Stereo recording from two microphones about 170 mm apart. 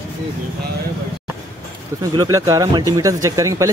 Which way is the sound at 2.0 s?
20° right (ahead or behind).